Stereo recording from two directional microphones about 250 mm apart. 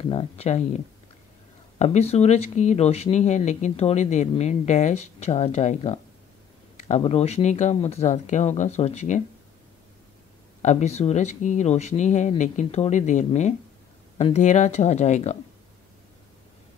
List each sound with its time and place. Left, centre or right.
0.0 s speech: left
10.6 s speech: left